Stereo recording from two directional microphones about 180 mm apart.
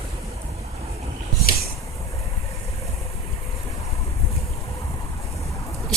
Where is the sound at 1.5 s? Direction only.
55° left (ahead or behind).